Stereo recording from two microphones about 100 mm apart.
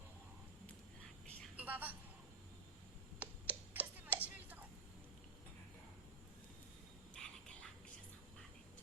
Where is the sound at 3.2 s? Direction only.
15° right (ahead or behind).